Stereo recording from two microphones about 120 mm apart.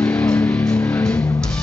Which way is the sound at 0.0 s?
20° left (ahead or behind).